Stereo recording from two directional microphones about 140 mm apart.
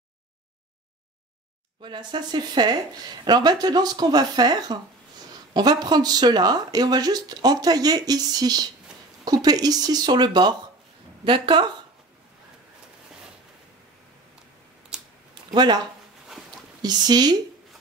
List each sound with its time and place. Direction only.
1.8 s speech: 30° right (ahead or behind)
15.5 s speech: 30° right (ahead or behind)
16.8 s speech: 30° right (ahead or behind)